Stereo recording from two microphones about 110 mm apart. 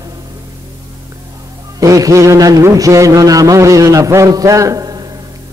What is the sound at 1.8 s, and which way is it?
A man's voice, 30° right (ahead or behind).